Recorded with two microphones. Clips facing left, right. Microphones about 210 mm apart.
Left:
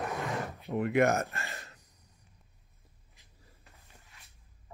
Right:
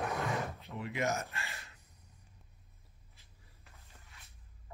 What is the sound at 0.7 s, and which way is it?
Speech, 55° left (ahead or behind).